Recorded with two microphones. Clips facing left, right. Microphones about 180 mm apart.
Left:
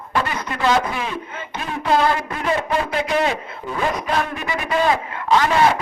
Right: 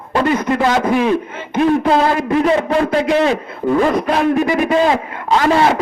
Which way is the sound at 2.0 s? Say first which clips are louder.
Right 6 dB; 40° right (ahead or behind).